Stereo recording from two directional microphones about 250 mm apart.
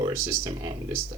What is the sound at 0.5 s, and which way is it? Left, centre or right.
Speech, right.